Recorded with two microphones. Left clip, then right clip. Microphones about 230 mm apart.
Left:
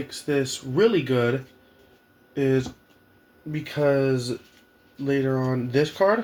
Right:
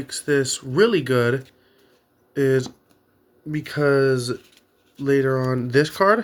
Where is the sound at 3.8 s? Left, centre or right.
Right.